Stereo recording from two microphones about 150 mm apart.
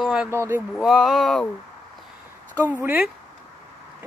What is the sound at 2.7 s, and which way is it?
Speech, 10° right (ahead or behind).